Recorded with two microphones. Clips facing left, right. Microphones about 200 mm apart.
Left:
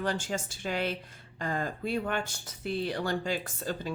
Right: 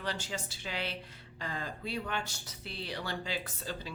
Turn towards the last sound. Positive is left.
turn(degrees=50)  # may be behind; listen again after turning